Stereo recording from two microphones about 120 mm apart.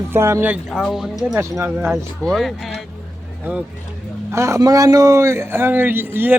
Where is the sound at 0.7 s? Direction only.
5° right (ahead or behind).